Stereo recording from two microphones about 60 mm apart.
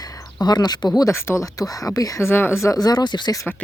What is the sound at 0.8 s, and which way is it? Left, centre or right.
Speech, left.